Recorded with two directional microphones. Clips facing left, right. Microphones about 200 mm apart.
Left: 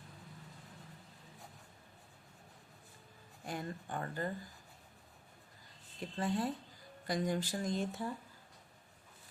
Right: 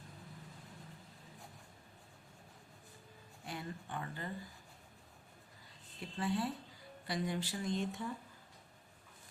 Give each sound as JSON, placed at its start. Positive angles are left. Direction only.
{"t": 3.4, "sound": "speech", "side_deg": 45}
{"t": 6.0, "sound": "speech", "side_deg": 45}